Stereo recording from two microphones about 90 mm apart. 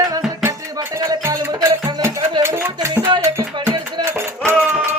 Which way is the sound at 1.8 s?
25° right (ahead or behind).